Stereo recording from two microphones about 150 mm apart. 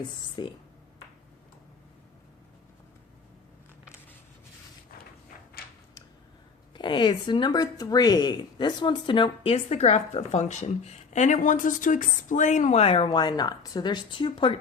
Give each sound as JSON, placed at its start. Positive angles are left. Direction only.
{"t": 0.4, "sound": "speech", "side_deg": 30}
{"t": 3.8, "sound": "a sound", "side_deg": 15}
{"t": 6.7, "sound": "speech", "side_deg": 30}